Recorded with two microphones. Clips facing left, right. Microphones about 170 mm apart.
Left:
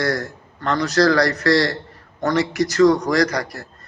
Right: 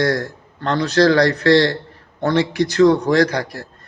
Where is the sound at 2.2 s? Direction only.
30° right (ahead or behind).